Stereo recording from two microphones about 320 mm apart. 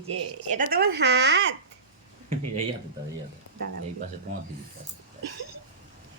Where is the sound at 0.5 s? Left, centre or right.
Right.